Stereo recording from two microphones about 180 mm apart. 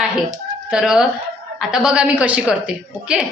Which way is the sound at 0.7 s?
5° right (ahead or behind).